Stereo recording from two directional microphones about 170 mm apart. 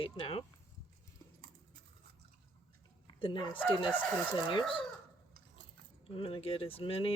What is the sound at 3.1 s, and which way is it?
Speech, 30° left (ahead or behind).